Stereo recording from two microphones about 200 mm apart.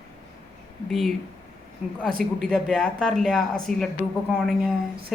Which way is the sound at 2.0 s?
45° right (ahead or behind).